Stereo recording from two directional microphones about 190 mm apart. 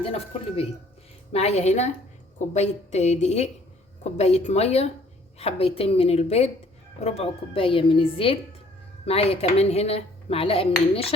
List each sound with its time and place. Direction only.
0.0 s dishes: 30° left (ahead or behind)
7.0 s speech: 35° left (ahead or behind)
9.0 s dishes: 30° left (ahead or behind)